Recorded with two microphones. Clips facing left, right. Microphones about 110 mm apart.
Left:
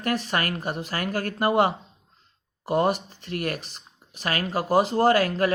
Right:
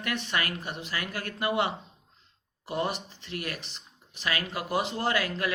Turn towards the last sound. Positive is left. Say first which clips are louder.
# left 8 dB
turn(degrees=40)  # may be behind; listen again after turning